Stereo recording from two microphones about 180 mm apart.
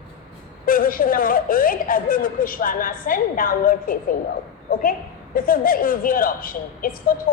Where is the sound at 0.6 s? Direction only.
50° left (ahead or behind).